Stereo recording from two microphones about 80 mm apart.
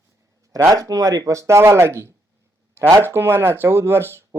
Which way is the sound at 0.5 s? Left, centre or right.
Right.